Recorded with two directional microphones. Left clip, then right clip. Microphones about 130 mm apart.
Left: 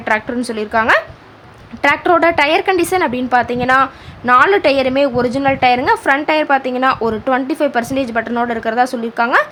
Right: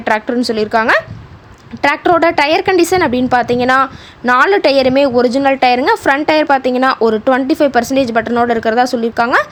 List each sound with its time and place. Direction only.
0.0 s a woman's voice: 35° right (ahead or behind)